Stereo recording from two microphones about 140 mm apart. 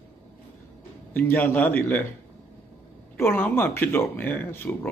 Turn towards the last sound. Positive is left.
turn(degrees=15)  # may be behind; listen again after turning